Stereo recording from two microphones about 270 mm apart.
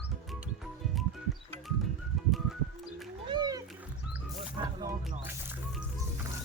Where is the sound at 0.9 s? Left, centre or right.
Centre.